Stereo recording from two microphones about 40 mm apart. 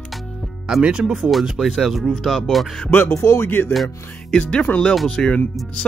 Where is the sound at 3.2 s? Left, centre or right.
Left.